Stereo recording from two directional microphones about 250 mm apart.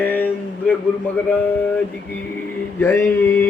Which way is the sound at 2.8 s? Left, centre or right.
Centre.